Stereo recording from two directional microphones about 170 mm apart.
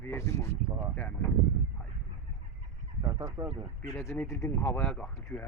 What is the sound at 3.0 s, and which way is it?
Speech, 15° right (ahead or behind).